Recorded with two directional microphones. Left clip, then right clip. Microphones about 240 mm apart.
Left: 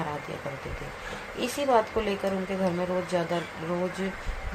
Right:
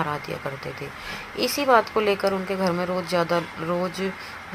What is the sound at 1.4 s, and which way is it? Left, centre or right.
Speech, right.